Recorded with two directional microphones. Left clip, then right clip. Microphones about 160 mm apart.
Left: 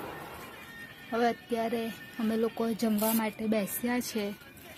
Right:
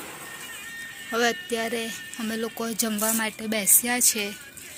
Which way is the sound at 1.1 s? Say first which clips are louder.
Right 4 dB; 15° right (ahead or behind).